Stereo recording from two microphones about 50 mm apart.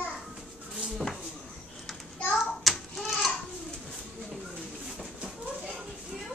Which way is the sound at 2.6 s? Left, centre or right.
Centre.